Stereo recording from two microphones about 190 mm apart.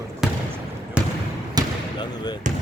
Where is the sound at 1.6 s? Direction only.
20° right (ahead or behind).